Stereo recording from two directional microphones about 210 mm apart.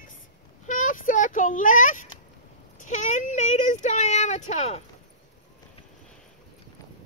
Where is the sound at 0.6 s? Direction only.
40° left (ahead or behind).